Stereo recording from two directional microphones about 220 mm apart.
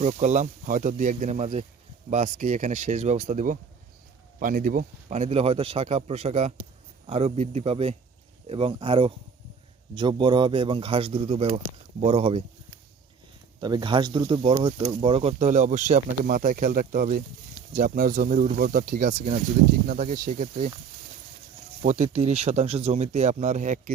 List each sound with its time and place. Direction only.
0.0 s speech: 30° right (ahead or behind)
13.6 s speech: 20° right (ahead or behind)
21.8 s speech: 30° right (ahead or behind)